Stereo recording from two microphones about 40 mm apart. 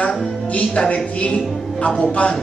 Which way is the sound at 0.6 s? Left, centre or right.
Left.